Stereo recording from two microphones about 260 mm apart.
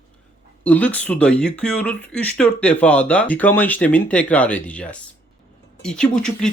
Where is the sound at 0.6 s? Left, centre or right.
Centre.